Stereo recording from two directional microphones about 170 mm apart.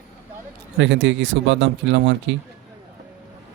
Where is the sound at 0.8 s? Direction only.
90° right.